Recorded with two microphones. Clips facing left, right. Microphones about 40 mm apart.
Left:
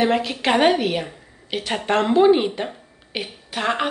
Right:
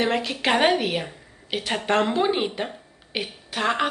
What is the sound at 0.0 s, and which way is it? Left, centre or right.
A woman's voice, centre.